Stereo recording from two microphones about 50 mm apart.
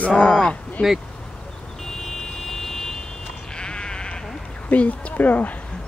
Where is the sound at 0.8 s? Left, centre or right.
Left.